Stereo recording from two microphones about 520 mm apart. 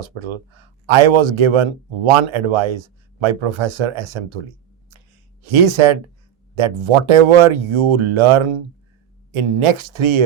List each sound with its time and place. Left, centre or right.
0.0 s speech: right